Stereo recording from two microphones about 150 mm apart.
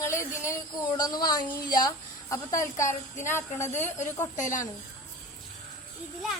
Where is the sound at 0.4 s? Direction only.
20° left (ahead or behind).